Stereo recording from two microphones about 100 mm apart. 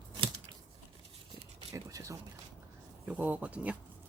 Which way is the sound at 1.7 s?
35° right (ahead or behind).